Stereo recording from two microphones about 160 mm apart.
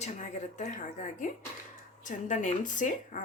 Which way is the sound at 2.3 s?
50° left (ahead or behind).